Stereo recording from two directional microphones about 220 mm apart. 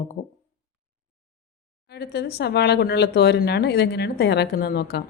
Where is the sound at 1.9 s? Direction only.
50° left (ahead or behind).